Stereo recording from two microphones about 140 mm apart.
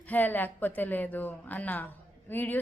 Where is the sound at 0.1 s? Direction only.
15° left (ahead or behind).